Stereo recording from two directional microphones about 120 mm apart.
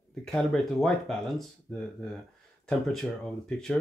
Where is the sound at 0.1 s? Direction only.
5° left (ahead or behind).